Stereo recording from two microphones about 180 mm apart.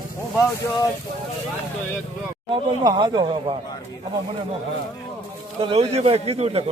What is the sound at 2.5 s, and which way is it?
Speech, 25° right (ahead or behind).